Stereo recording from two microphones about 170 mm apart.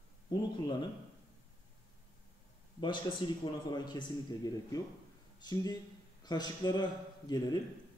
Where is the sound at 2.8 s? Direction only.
30° left (ahead or behind).